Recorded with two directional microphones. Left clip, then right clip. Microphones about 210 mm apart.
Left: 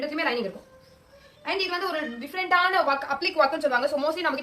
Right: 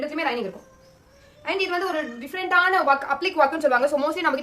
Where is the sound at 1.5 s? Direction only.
45° right (ahead or behind).